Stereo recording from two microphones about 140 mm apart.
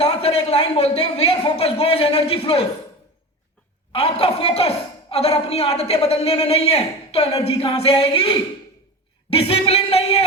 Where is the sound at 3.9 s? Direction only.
45° left (ahead or behind).